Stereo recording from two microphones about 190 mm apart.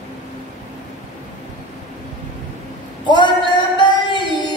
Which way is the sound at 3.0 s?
25° left (ahead or behind).